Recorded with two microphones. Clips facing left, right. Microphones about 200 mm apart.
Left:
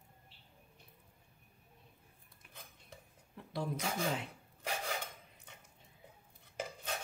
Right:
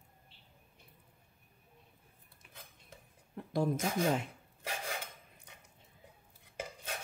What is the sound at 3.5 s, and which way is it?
Speech, 50° right (ahead or behind).